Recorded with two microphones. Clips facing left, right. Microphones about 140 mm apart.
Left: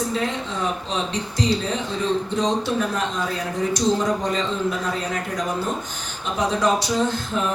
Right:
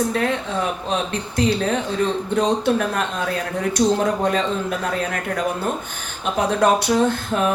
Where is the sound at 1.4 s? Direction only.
55° right (ahead or behind).